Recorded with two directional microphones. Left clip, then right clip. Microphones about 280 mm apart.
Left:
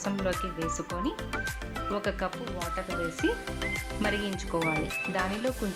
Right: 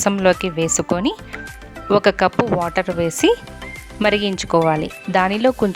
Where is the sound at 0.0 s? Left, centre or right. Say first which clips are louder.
Right 15 dB; right.